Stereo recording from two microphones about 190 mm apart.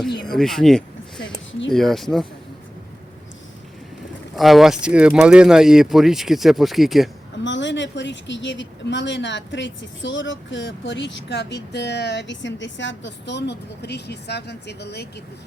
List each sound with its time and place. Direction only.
0.3 s speech: centre (ahead or behind)
4.4 s speech: centre (ahead or behind)
7.4 s speech: 70° left (ahead or behind)